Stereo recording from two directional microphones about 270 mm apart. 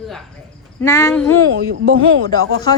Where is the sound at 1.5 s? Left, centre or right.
Right.